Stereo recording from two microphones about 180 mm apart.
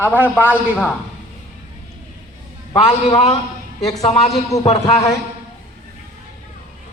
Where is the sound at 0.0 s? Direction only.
10° right (ahead or behind).